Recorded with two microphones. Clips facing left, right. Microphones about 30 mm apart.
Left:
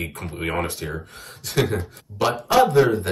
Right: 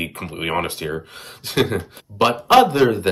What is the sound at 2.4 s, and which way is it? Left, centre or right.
Speech, right.